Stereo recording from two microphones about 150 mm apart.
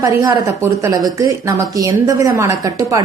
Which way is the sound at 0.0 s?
25° right (ahead or behind).